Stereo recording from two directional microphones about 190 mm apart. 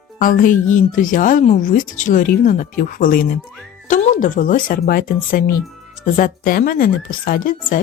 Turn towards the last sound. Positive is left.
turn(degrees=50)  # may be behind; listen again after turning